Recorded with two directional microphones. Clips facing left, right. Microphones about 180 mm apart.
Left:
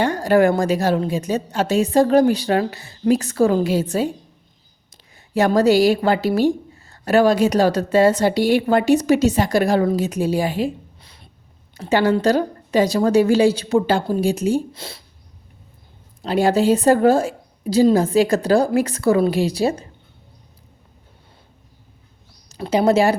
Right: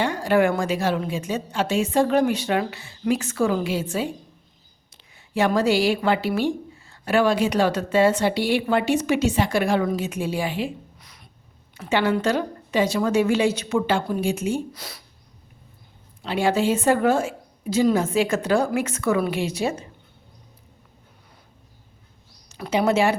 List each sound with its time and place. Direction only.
0.0 s a woman's voice: 40° left (ahead or behind)
10.9 s a sound: 30° left (ahead or behind)
11.8 s a woman's voice: 40° left (ahead or behind)
16.2 s a woman's voice: 40° left (ahead or behind)
22.4 s speech: 35° left (ahead or behind)